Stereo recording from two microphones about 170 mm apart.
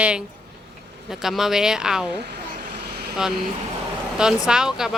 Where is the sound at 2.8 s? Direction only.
70° right (ahead or behind).